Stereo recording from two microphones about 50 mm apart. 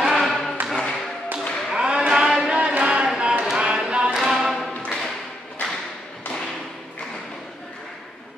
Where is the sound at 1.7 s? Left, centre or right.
Centre.